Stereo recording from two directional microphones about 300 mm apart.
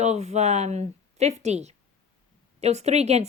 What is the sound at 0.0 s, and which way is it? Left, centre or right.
A woman's voice, right.